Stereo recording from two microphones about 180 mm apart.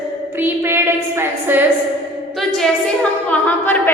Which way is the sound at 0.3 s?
10° right (ahead or behind).